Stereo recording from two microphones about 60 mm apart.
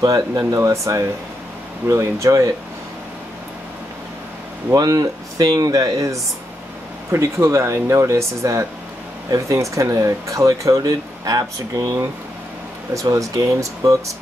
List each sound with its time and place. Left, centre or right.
0.0 s speech: right
0.6 s speech: right
4.7 s speech: right
7.1 s speech: right